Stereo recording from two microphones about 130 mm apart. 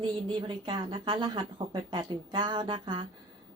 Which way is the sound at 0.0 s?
40° right (ahead or behind).